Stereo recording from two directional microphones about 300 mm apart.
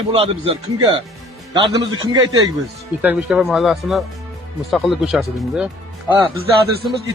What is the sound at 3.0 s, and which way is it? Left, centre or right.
Speech, centre.